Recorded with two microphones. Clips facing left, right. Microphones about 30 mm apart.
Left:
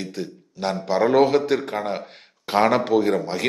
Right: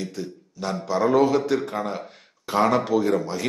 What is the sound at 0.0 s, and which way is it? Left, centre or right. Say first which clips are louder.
A man's voice: left 1 dB; left.